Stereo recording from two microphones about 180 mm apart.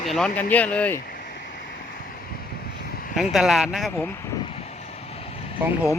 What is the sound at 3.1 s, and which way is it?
Speech, centre (ahead or behind).